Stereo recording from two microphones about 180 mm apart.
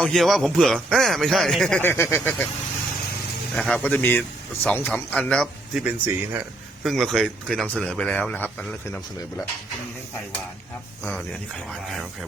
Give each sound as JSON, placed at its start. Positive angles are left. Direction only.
{"t": 0.0, "sound": "speech", "side_deg": 0}
{"t": 3.5, "sound": "speech", "side_deg": 5}
{"t": 6.8, "sound": "speech", "side_deg": 0}